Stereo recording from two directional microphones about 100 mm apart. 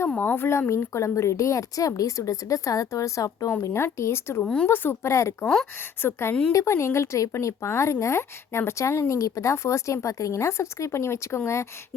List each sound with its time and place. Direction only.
0.1 s a woman's voice: 15° left (ahead or behind)
4.4 s speech: 5° left (ahead or behind)
4.7 s speech: 20° left (ahead or behind)